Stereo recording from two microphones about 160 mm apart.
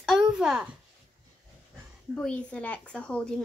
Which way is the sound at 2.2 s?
5° left (ahead or behind).